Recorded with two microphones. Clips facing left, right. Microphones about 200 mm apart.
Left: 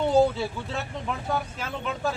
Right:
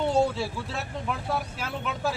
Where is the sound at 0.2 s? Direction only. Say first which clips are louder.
Left 3 dB; centre (ahead or behind).